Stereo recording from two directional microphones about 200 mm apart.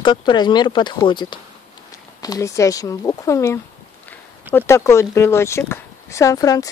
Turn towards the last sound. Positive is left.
turn(degrees=15)  # may be behind; listen again after turning